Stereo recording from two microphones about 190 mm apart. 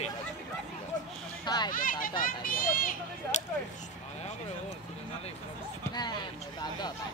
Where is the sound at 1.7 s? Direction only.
45° left (ahead or behind).